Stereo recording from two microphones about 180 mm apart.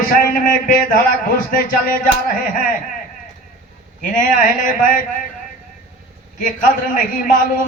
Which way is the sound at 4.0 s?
50° left (ahead or behind).